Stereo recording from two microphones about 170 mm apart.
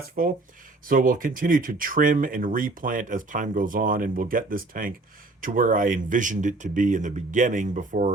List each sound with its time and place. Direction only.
0.0 s speech: 55° right (ahead or behind)